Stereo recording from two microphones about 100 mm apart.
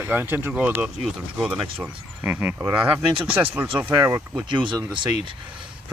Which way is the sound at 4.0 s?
30° right (ahead or behind).